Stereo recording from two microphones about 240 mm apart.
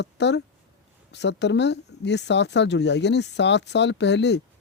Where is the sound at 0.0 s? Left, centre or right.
Left.